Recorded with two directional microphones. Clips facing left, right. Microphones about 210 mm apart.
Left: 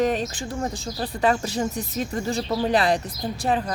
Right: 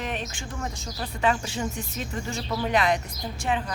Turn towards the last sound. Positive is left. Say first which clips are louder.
# left 4 dB
turn(degrees=35)  # may be behind; listen again after turning